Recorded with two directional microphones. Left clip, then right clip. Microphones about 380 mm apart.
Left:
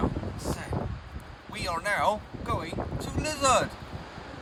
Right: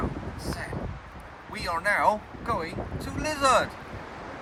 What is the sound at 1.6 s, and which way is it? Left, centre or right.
Speech, centre.